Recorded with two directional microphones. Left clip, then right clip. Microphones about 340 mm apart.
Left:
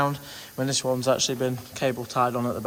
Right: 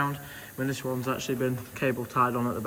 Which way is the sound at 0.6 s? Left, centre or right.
Centre.